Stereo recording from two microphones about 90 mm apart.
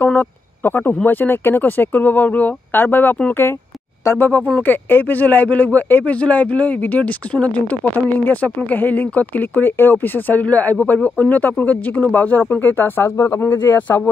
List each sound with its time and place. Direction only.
0.0 s speech: 20° left (ahead or behind)
4.6 s speech: 20° left (ahead or behind)